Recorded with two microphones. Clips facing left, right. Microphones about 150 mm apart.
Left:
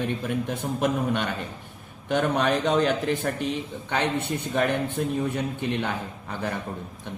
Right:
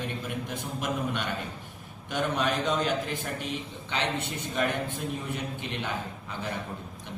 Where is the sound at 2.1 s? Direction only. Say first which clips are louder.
Left 5 dB; 50° left (ahead or behind).